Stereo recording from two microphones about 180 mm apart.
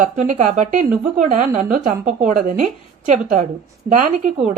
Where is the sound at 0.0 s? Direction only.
45° right (ahead or behind).